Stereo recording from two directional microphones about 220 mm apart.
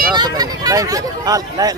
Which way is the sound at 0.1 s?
20° right (ahead or behind).